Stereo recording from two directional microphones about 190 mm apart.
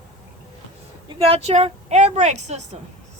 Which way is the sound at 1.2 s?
35° right (ahead or behind).